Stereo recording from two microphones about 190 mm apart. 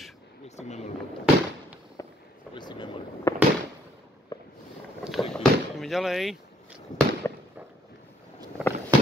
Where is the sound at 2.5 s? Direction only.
25° left (ahead or behind).